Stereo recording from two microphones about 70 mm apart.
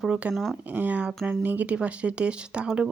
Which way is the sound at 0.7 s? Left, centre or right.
Right.